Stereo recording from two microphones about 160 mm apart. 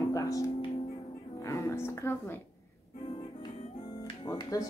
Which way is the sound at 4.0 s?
25° left (ahead or behind).